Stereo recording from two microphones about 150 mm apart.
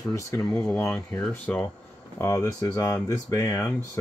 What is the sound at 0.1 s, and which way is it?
Speech, 20° left (ahead or behind).